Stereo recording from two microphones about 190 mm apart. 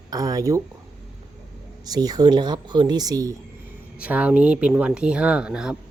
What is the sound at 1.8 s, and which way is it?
Speech, 20° right (ahead or behind).